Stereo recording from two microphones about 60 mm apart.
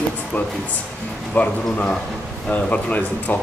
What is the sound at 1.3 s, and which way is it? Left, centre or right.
Speech, left.